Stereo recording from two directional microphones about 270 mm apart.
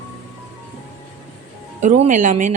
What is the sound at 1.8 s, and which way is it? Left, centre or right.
Speech, right.